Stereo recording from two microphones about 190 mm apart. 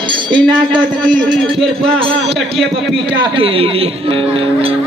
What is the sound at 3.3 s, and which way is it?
Speech, 30° right (ahead or behind).